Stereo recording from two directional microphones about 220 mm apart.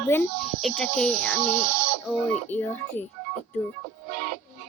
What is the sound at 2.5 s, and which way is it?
Speech, 10° left (ahead or behind).